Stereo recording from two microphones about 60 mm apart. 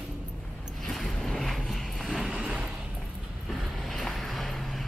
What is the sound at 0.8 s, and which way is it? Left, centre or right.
Vehicle, centre.